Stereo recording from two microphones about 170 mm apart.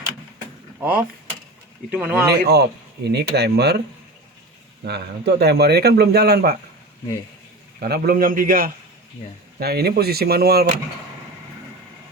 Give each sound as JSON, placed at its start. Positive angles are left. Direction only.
{"t": 0.8, "sound": "speech", "side_deg": -10}
{"t": 2.3, "sound": "speech", "side_deg": -75}
{"t": 4.9, "sound": "speech", "side_deg": -75}
{"t": 7.8, "sound": "speech", "side_deg": -65}